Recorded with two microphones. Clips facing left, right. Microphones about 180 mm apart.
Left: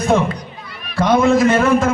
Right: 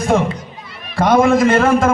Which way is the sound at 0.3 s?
25° right (ahead or behind).